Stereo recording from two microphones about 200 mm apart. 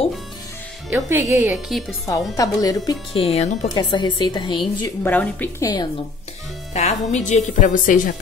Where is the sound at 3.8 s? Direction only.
25° left (ahead or behind).